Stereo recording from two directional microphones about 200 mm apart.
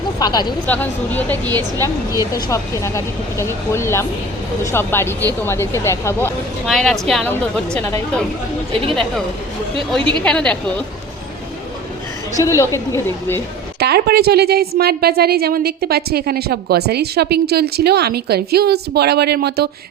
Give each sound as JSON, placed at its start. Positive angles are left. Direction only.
{"t": 0.2, "sound": "speech", "side_deg": 20}
{"t": 0.7, "sound": "speech", "side_deg": 10}
{"t": 1.5, "sound": "a woman's voice", "side_deg": -20}
{"t": 2.3, "sound": "speech", "side_deg": 15}
{"t": 6.7, "sound": "a woman's voice", "side_deg": 0}
{"t": 10.2, "sound": "a woman's voice", "side_deg": 5}
{"t": 12.4, "sound": "speech", "side_deg": 15}
{"t": 13.7, "sound": "a woman's voice", "side_deg": -55}